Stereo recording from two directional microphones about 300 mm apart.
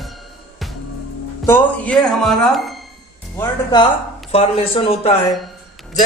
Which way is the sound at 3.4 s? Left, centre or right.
Centre.